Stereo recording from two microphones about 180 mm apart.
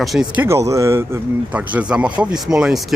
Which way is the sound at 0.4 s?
15° right (ahead or behind).